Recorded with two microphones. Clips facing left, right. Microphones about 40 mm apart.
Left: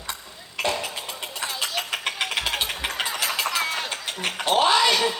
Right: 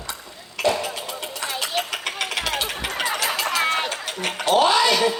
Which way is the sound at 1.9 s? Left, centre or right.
Left.